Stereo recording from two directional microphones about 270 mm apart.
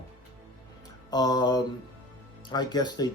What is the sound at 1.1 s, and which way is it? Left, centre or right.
Speech, centre.